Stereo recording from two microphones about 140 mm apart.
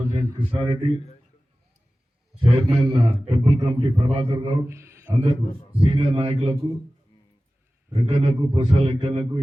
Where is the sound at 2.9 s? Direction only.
35° right (ahead or behind).